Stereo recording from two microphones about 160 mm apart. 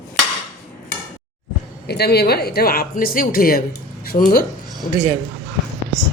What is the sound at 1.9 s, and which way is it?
A woman's voice, 90° left.